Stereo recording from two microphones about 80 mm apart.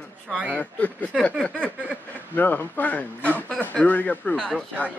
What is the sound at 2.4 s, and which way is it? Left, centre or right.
A man's voice, left.